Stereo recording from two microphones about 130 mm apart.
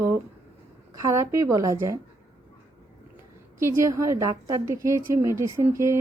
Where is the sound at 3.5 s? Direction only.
25° right (ahead or behind).